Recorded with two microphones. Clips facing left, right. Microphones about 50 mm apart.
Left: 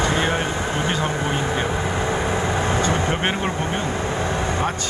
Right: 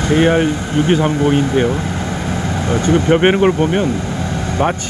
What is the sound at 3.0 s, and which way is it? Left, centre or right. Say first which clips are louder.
Speech: right 11 dB; right.